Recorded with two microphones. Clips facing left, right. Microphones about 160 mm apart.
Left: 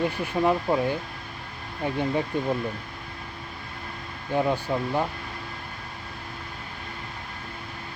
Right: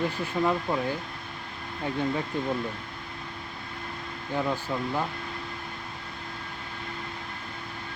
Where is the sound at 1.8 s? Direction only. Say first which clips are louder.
Left 3 dB; 20° left (ahead or behind).